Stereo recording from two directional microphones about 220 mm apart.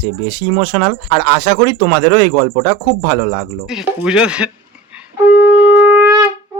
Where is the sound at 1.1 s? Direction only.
20° left (ahead or behind).